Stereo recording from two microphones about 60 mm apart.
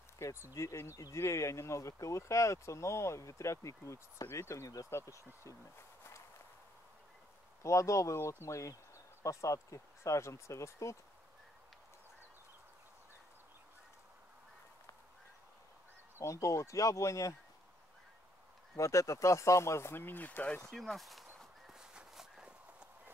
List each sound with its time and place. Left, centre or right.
0.2 s speech: left
4.6 s speech: left
4.9 s speech: left
7.6 s speech: left
16.2 s speech: left
18.8 s speech: left
20.7 s walk: centre